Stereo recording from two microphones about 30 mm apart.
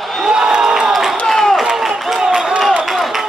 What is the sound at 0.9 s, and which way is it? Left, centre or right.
Crowd, centre.